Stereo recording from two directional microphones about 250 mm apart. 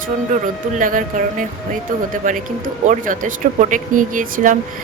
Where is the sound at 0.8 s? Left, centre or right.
Right.